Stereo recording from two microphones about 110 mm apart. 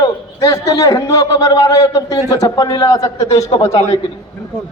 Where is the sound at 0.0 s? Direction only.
30° left (ahead or behind).